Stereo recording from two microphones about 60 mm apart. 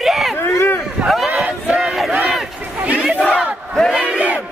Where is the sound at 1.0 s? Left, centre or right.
Centre.